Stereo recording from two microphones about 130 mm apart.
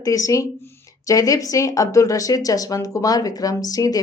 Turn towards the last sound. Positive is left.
turn(degrees=30)  # may be behind; listen again after turning